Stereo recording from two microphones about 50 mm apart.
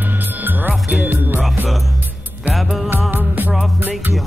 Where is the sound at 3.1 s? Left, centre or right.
Right.